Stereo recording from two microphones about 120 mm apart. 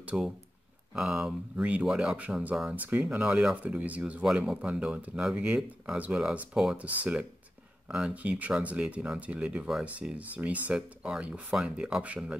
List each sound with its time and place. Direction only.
0.0 s speech: 5° right (ahead or behind)